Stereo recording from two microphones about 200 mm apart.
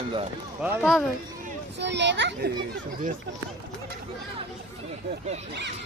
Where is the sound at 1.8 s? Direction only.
60° right (ahead or behind).